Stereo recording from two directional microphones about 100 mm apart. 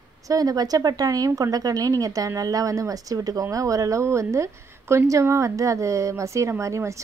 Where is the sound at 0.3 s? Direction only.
40° right (ahead or behind).